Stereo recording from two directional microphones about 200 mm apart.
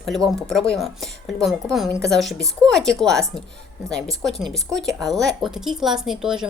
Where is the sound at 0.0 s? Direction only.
Centre (ahead or behind).